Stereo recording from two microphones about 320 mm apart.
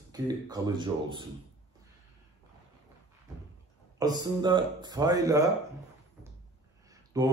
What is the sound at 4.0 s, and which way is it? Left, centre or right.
A man's voice, centre.